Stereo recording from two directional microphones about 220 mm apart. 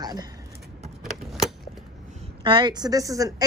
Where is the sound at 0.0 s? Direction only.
20° right (ahead or behind).